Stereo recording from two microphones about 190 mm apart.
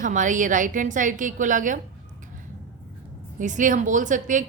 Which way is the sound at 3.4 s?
40° right (ahead or behind).